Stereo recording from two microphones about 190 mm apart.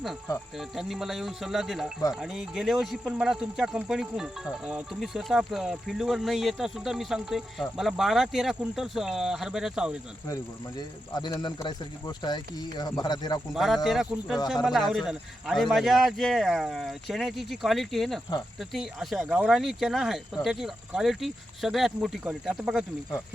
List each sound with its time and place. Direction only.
0.8 s speech: centre (ahead or behind)
11.1 s speech: 20° left (ahead or behind)
13.5 s speech: centre (ahead or behind)